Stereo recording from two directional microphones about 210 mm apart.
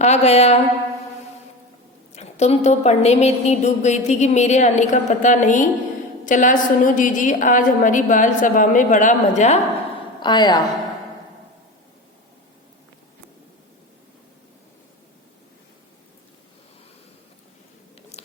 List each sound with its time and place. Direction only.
0.0 s a woman's voice: 30° left (ahead or behind)
2.1 s a woman's voice: 30° left (ahead or behind)
10.2 s a woman's voice: 20° left (ahead or behind)